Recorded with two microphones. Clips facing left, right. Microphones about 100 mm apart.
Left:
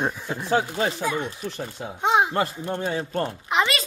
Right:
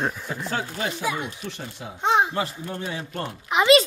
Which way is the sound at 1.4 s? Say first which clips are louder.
Left 3 dB; 45° left (ahead or behind).